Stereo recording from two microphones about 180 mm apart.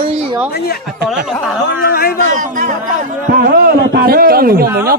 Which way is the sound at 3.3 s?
55° right (ahead or behind).